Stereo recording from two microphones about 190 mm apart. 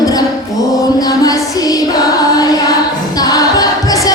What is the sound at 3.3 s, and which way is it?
A capella, 20° left (ahead or behind).